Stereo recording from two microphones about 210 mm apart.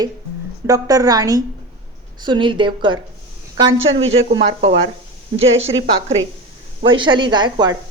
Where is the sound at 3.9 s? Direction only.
65° right (ahead or behind).